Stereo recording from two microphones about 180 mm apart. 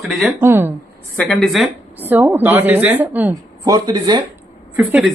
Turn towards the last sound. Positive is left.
turn(degrees=-5)  # may be behind; listen again after turning